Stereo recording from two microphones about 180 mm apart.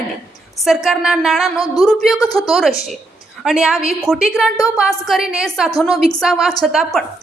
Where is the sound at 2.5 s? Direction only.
Centre (ahead or behind).